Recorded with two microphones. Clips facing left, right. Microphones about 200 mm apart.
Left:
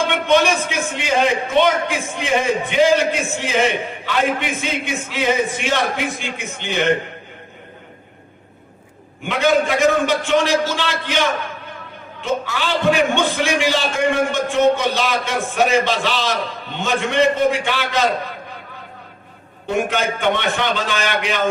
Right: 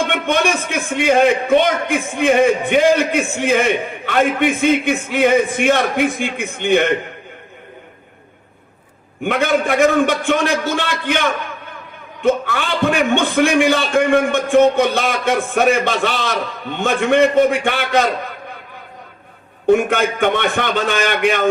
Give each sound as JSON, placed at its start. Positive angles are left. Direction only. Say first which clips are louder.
{"t": 0.1, "sound": "a man's voice", "louder": "left 1 dB", "side_deg": -55}
{"t": 9.2, "sound": "a man's voice", "louder": "even", "side_deg": -55}
{"t": 19.6, "sound": "a man's voice", "louder": "right 6 dB", "side_deg": -55}